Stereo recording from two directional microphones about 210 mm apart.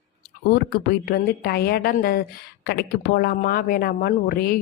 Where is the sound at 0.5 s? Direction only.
45° left (ahead or behind).